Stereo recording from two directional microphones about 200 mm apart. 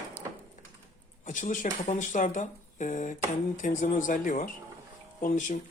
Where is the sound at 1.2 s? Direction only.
40° left (ahead or behind).